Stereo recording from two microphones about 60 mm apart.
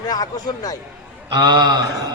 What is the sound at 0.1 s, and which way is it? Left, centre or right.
Speech, left.